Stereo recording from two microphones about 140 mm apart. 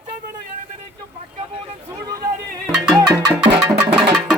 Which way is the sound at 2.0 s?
25° right (ahead or behind).